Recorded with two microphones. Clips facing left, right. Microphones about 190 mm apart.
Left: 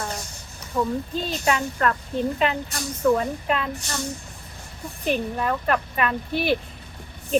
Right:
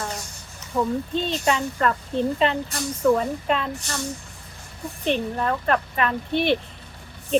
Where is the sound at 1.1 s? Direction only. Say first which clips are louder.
Right 2 dB; 5° left (ahead or behind).